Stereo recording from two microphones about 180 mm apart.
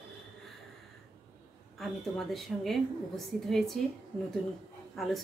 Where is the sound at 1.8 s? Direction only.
Centre (ahead or behind).